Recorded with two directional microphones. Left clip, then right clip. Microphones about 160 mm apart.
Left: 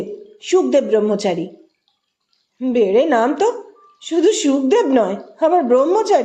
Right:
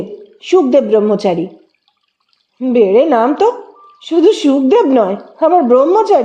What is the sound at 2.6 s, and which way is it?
A woman's voice, 35° right (ahead or behind).